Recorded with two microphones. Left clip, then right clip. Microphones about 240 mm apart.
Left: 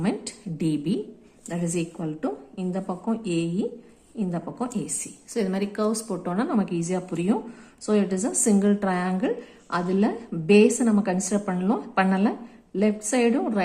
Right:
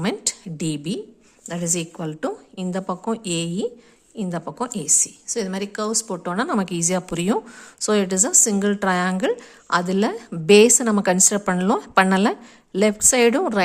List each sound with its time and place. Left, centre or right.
0.0 s a woman's voice: right